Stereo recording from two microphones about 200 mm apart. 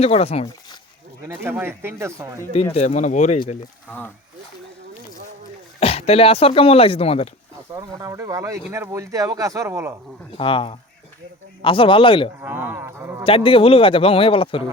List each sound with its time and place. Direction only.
0.0 s speech: 30° left (ahead or behind)
1.2 s speech: 10° right (ahead or behind)
2.7 s speech: 35° left (ahead or behind)
5.8 s speech: 30° left (ahead or behind)
7.7 s speech: 20° right (ahead or behind)
10.3 s speech: 25° left (ahead or behind)
12.4 s speech: 10° right (ahead or behind)
13.2 s speech: 25° left (ahead or behind)